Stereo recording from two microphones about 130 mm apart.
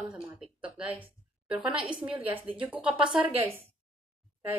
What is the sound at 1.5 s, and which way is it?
A woman's voice, 5° right (ahead or behind).